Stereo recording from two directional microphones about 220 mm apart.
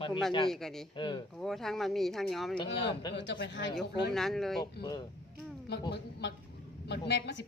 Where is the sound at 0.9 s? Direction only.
20° left (ahead or behind).